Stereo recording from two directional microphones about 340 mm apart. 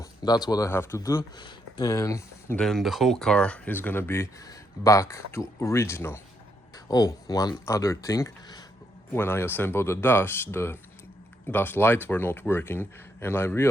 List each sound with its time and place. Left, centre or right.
0.0 s speech: centre